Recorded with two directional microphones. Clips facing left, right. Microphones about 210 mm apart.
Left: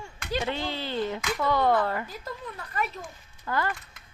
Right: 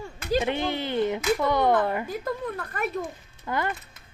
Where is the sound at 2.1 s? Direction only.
55° right (ahead or behind).